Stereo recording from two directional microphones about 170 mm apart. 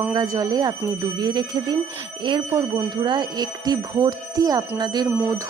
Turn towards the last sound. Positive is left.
turn(degrees=-10)  # may be behind; listen again after turning